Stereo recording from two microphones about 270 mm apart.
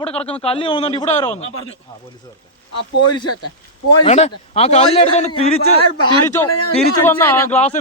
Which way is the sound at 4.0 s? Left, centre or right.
Left.